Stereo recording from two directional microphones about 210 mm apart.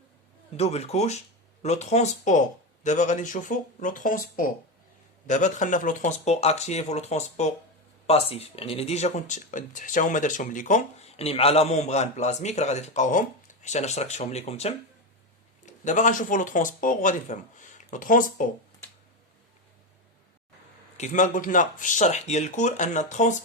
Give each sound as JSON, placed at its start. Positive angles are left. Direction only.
{"t": 0.5, "sound": "speech", "side_deg": 30}
{"t": 21.0, "sound": "speech", "side_deg": 40}